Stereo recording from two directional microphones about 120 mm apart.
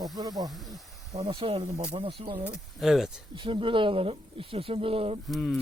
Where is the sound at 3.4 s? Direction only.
45° right (ahead or behind).